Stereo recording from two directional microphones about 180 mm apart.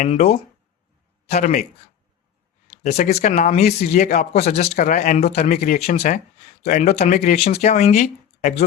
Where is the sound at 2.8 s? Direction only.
40° left (ahead or behind).